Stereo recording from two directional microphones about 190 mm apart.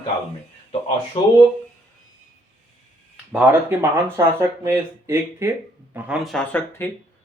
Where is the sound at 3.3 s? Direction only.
10° right (ahead or behind).